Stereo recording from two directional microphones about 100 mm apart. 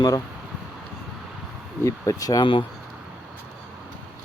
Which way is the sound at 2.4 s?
55° left (ahead or behind).